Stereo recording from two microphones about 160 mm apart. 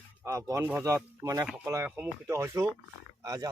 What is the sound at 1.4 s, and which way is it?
Speech, 10° right (ahead or behind).